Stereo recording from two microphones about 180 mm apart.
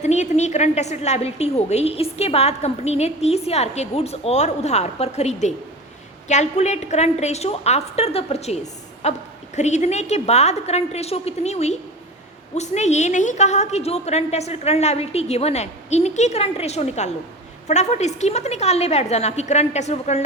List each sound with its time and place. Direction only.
0.0 s a woman's voice: 40° left (ahead or behind)